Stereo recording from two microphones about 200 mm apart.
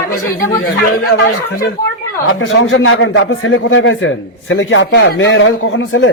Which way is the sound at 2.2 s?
80° left.